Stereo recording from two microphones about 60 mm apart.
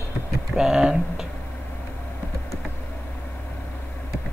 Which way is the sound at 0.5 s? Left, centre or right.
Centre.